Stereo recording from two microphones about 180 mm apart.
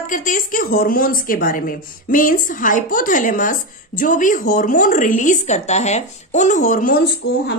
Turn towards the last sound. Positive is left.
turn(degrees=90)